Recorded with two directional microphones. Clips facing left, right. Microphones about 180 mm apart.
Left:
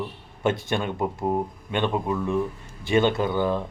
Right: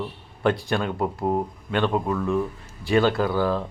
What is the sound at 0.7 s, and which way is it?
Speech, centre (ahead or behind).